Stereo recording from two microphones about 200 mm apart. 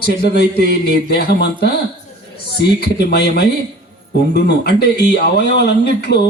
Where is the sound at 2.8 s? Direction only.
50° left (ahead or behind).